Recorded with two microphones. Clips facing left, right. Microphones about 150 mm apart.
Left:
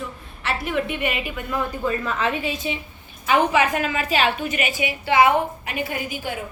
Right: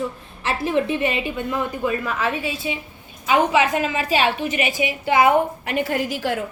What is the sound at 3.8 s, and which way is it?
Speech, 25° right (ahead or behind).